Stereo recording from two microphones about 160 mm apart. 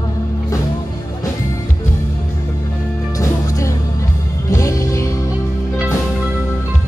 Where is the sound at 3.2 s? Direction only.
20° left (ahead or behind).